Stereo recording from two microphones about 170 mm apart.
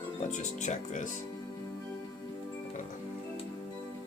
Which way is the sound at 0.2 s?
45° left (ahead or behind).